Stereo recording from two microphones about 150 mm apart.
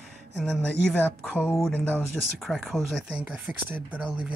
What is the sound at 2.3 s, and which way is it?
Speech, centre (ahead or behind).